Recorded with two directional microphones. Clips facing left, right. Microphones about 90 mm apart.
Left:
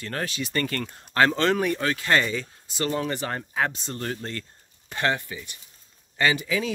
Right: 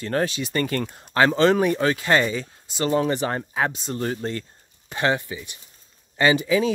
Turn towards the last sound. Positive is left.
turn(degrees=-25)  # may be behind; listen again after turning